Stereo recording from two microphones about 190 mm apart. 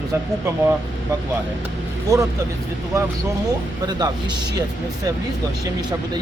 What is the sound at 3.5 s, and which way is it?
Speech, 20° right (ahead or behind).